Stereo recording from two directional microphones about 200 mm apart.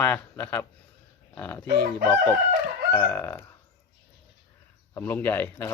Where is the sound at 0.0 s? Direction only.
10° left (ahead or behind).